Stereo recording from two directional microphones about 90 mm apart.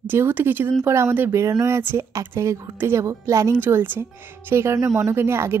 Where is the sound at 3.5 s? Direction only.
25° right (ahead or behind).